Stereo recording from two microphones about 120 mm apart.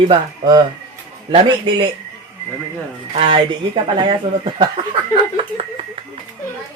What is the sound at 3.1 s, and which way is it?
Speech, 45° right (ahead or behind).